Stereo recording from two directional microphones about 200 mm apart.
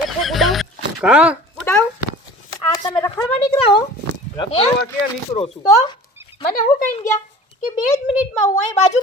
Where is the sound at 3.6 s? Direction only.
25° left (ahead or behind).